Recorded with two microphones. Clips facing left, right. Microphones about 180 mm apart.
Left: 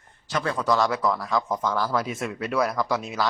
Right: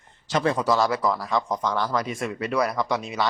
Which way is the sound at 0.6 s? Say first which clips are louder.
Right 1 dB; centre (ahead or behind).